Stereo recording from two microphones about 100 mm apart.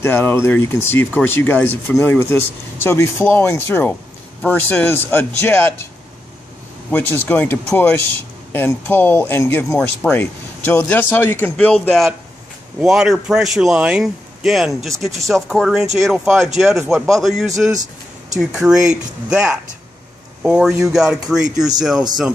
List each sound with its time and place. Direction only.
0.0 s speech: 25° left (ahead or behind)
6.9 s speech: 20° left (ahead or behind)
12.8 s a man's voice: 5° right (ahead or behind)